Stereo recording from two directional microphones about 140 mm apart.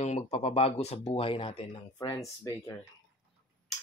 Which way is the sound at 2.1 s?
25° left (ahead or behind).